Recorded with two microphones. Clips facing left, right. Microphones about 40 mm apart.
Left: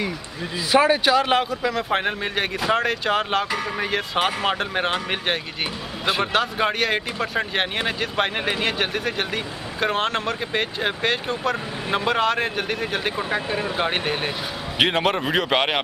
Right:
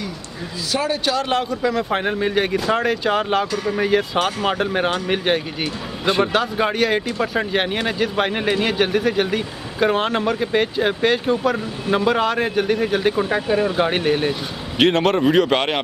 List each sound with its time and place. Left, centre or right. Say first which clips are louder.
0.7 s a man's voice: left 4 dB; left
1.5 s a man's voice: right 2 dB; centre